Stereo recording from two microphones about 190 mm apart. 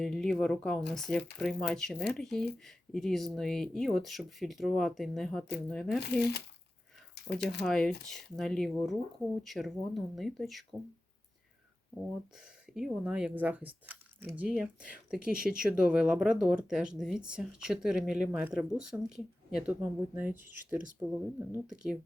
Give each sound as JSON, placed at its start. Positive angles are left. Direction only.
{"t": 0.0, "sound": "speech", "side_deg": 0}
{"t": 6.0, "sound": "speech", "side_deg": 60}
{"t": 7.6, "sound": "speech", "side_deg": 5}
{"t": 12.7, "sound": "speech", "side_deg": -5}
{"t": 15.4, "sound": "speech", "side_deg": -50}
{"t": 15.6, "sound": "speech", "side_deg": -5}